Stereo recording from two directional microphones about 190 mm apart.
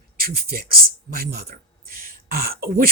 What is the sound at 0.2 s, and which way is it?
Speech, 50° right (ahead or behind).